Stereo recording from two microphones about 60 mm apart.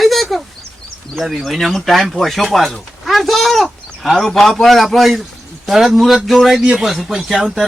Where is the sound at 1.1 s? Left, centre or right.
Centre.